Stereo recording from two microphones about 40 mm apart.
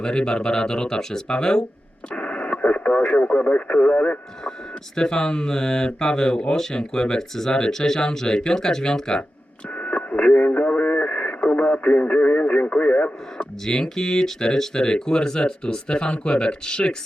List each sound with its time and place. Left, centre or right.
0.0 s speech: left
2.1 s speech: left
4.9 s speech: centre
9.7 s speech: left
13.4 s speech: left